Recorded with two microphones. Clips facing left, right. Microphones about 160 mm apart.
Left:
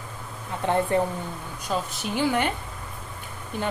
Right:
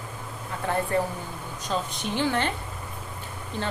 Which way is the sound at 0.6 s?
20° left (ahead or behind).